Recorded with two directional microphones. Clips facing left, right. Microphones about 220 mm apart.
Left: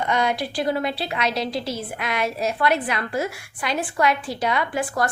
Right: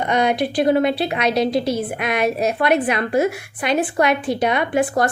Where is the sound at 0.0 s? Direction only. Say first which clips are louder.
Right 5 dB; 20° right (ahead or behind).